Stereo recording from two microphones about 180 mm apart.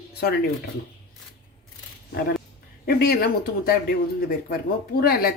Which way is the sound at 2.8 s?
60° left (ahead or behind).